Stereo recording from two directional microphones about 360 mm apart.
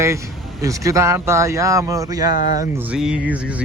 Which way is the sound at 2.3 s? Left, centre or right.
Left.